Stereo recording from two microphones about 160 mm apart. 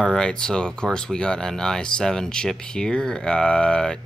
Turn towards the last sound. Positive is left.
turn(degrees=5)  # may be behind; listen again after turning